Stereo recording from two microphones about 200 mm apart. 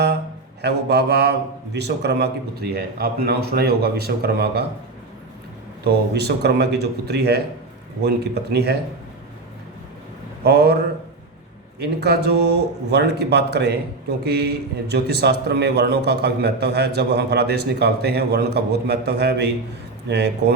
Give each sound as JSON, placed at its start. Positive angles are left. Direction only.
{"t": 0.6, "sound": "a man's voice", "side_deg": -55}
{"t": 5.8, "sound": "a man's voice", "side_deg": -55}
{"t": 10.4, "sound": "a man's voice", "side_deg": -55}
{"t": 14.9, "sound": "a man's voice", "side_deg": -55}